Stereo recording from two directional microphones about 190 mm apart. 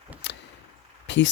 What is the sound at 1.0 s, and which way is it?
Speech, 70° left (ahead or behind).